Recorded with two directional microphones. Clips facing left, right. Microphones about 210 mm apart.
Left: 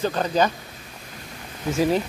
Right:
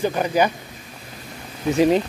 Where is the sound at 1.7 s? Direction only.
20° right (ahead or behind).